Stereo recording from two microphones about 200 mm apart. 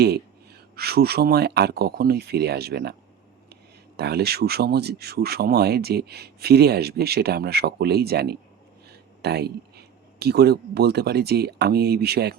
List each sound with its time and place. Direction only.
0.8 s speech: 50° right (ahead or behind)